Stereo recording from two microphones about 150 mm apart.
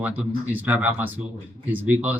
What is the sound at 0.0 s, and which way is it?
Speech, 10° right (ahead or behind).